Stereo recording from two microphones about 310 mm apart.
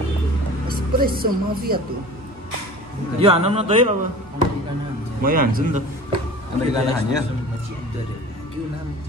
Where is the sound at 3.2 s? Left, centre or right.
Centre.